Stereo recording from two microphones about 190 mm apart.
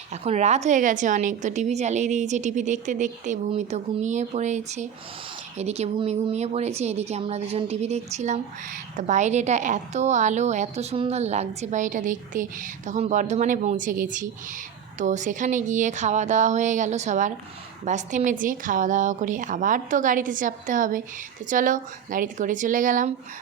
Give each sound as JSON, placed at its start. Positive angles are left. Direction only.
{"t": 0.1, "sound": "a woman's voice", "side_deg": -35}